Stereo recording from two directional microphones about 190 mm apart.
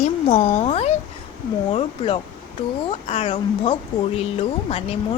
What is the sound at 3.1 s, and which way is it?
A child's voice, 35° left (ahead or behind).